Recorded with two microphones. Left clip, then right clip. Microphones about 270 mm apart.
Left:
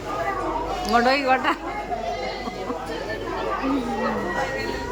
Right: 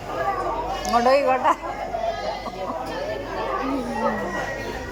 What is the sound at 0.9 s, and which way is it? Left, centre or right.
Speech, centre.